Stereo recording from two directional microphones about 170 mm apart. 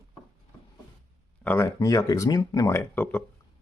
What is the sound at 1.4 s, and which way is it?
Speech, 15° left (ahead or behind).